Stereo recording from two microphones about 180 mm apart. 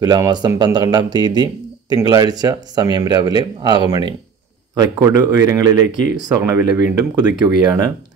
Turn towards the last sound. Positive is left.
turn(degrees=-20)  # may be behind; listen again after turning